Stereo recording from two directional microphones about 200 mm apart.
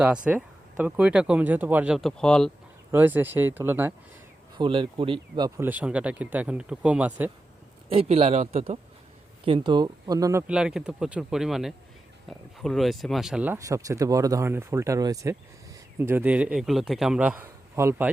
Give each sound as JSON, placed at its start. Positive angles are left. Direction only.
{"t": 0.3, "sound": "speech", "side_deg": -5}
{"t": 2.9, "sound": "speech", "side_deg": -10}
{"t": 4.5, "sound": "speech", "side_deg": -25}
{"t": 5.5, "sound": "speech", "side_deg": -10}
{"t": 7.9, "sound": "speech", "side_deg": -30}
{"t": 10.4, "sound": "speech", "side_deg": -5}